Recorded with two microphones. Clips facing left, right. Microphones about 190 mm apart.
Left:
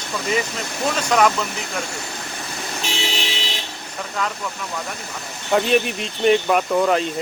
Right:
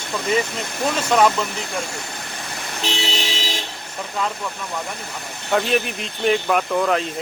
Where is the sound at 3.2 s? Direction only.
40° right (ahead or behind).